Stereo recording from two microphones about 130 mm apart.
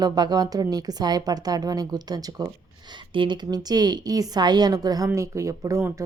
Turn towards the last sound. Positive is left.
turn(degrees=-20)  # may be behind; listen again after turning